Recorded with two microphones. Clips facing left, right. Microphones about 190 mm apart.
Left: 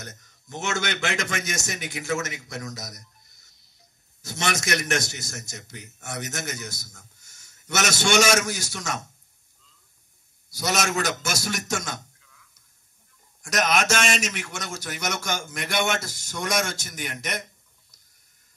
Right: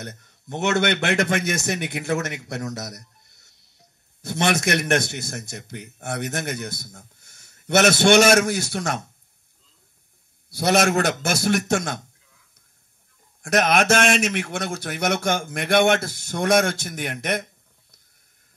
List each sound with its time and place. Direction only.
0.0 s a man's voice: 60° right (ahead or behind)
10.5 s a man's voice: 60° right (ahead or behind)
13.4 s a man's voice: 60° right (ahead or behind)